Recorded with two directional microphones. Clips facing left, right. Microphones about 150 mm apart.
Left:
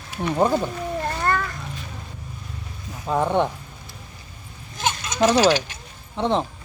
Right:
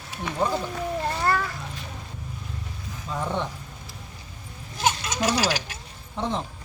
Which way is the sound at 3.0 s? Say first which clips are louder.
Left 8 dB; 60° left (ahead or behind).